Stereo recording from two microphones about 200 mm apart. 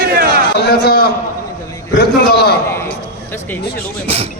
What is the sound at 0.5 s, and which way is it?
Speech, 55° left (ahead or behind).